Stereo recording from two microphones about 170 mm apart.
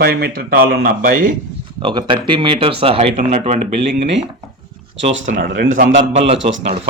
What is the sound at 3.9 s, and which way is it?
Speech, 90° right.